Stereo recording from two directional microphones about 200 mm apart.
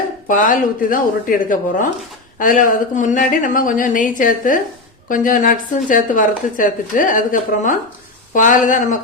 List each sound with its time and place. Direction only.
0.3 s a woman's voice: 40° left (ahead or behind)